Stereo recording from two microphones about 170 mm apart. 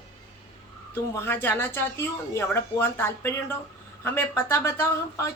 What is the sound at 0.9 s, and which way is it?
Speech, 15° left (ahead or behind).